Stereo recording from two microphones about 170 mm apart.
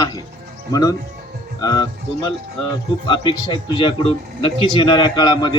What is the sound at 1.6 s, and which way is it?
Speech, 25° left (ahead or behind).